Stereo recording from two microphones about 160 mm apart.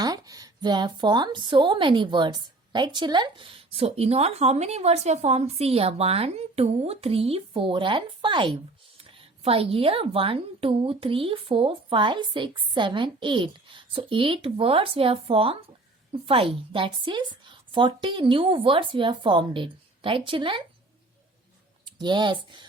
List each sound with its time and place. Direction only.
0.0 s speech: 20° right (ahead or behind)
21.8 s speech: 30° right (ahead or behind)